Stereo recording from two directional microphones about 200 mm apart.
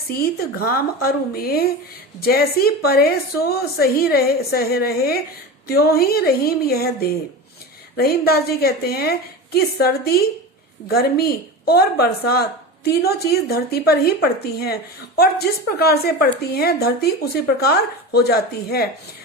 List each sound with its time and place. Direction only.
0.1 s a woman's voice: 50° left (ahead or behind)
7.9 s a woman's voice: 50° left (ahead or behind)